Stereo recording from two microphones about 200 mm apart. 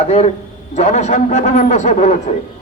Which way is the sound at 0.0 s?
30° left (ahead or behind).